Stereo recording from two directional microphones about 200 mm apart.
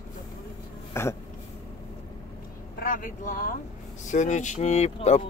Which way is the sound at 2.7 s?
45° left (ahead or behind).